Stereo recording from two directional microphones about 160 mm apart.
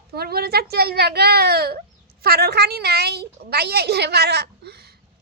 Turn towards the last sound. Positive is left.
turn(degrees=-85)